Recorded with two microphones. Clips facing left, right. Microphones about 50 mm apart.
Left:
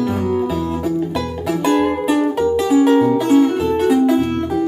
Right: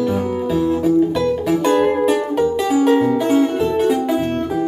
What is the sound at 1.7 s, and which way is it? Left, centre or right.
Music, centre.